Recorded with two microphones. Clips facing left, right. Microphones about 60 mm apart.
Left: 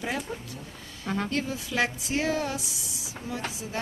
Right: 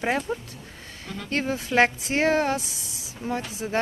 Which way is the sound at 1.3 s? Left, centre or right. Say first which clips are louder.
Right 6 dB; right.